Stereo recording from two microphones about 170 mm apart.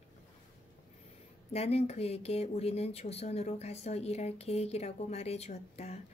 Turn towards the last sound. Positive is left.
turn(degrees=40)  # may be behind; listen again after turning